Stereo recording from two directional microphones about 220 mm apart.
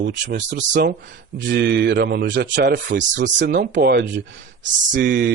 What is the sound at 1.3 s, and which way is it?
Speech, 50° right (ahead or behind).